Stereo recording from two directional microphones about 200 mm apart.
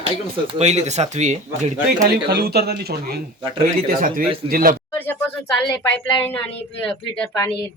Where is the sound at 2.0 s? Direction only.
50° right (ahead or behind).